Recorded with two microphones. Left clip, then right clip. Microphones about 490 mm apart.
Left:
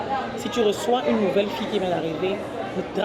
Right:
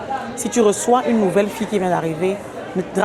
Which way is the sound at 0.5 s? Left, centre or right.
Right.